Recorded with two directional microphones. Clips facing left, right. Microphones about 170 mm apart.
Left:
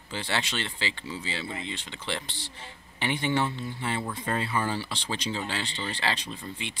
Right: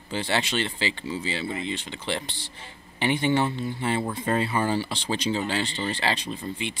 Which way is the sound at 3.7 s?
25° right (ahead or behind).